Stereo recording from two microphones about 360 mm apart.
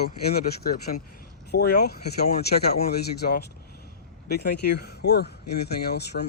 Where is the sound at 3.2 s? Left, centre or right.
Left.